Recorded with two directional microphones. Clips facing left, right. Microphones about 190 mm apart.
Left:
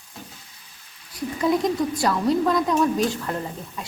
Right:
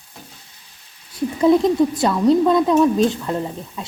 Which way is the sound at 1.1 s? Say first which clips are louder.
Right 7 dB; 25° right (ahead or behind).